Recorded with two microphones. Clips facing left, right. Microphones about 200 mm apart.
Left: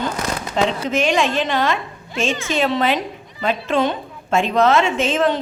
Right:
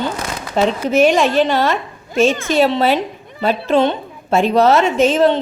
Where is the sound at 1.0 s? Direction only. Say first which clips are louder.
Right 7 dB; 40° right (ahead or behind).